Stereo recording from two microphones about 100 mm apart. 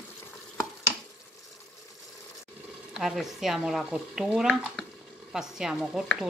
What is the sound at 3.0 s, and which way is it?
Speech, 5° right (ahead or behind).